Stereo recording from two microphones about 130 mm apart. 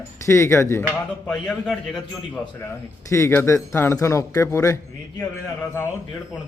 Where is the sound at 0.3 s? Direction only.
20° left (ahead or behind).